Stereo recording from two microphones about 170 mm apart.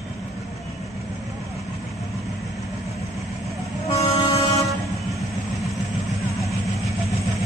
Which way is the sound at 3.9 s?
35° left (ahead or behind).